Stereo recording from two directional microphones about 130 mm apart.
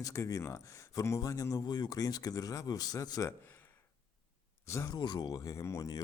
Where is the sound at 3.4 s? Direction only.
15° left (ahead or behind).